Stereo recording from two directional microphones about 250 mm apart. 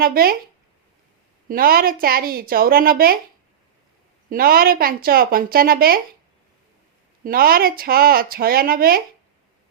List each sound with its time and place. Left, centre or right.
0.0 s a woman's voice: right
1.5 s a woman's voice: right
4.3 s a woman's voice: right
7.3 s a woman's voice: right